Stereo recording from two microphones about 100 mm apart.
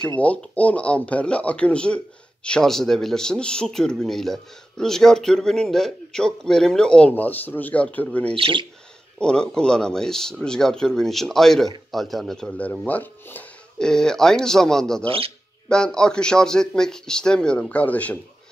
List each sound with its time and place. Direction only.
0.0 s speech: 15° left (ahead or behind)
8.4 s speech: 55° right (ahead or behind)
9.2 s speech: 10° left (ahead or behind)
15.0 s speech: 70° right (ahead or behind)
15.7 s speech: 5° left (ahead or behind)